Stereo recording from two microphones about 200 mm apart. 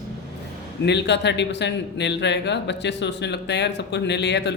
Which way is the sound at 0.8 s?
60° left (ahead or behind).